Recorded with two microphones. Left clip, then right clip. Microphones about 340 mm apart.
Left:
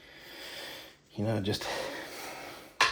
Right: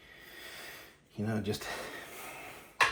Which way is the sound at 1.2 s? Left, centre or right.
Left.